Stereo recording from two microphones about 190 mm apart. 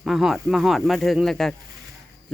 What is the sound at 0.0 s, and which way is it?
Speech, centre (ahead or behind).